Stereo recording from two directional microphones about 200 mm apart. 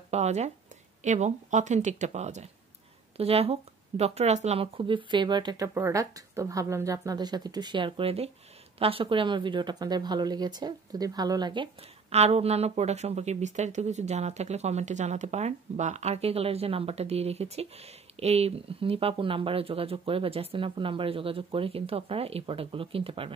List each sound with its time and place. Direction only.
0.1 s speech: 35° right (ahead or behind)